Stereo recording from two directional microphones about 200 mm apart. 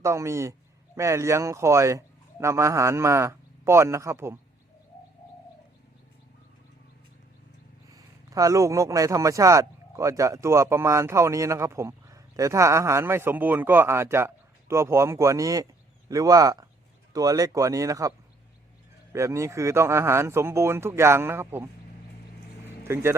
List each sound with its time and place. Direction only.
0.0 s a man's voice: 15° right (ahead or behind)
7.9 s a man's voice: 15° right (ahead or behind)
19.1 s a man's voice: 15° right (ahead or behind)
22.8 s speech: 10° right (ahead or behind)